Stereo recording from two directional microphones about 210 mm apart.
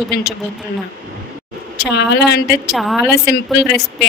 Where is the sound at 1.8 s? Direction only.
50° left (ahead or behind).